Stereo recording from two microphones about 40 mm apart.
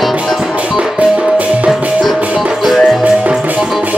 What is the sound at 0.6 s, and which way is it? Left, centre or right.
Music, right.